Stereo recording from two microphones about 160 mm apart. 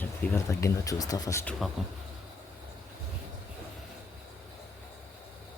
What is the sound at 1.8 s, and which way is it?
Speech, centre (ahead or behind).